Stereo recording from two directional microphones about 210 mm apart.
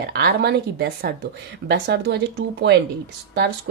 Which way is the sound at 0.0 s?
50° right (ahead or behind).